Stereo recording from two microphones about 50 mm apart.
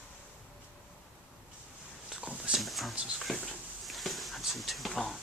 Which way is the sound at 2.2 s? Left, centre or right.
Right.